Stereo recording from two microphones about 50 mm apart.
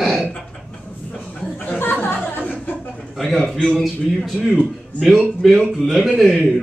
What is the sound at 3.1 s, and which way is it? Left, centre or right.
Speech, centre.